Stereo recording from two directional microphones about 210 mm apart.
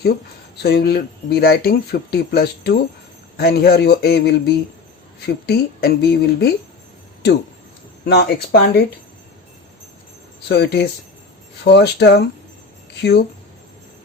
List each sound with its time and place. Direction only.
0.0 s speech: 50° left (ahead or behind)
8.0 s speech: 50° left (ahead or behind)
10.5 s speech: 50° left (ahead or behind)